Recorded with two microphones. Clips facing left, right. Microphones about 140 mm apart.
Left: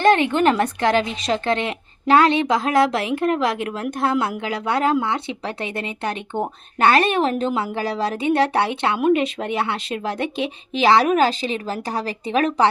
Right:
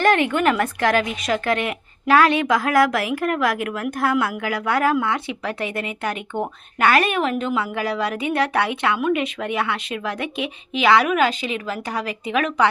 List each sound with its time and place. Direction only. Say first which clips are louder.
0.0 s speech: left 2 dB; 25° left (ahead or behind)